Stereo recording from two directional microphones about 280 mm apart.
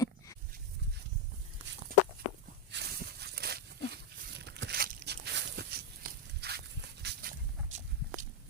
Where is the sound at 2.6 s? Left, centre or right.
Right.